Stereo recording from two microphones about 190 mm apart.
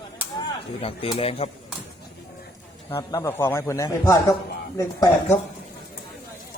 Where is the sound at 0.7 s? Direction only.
30° left (ahead or behind).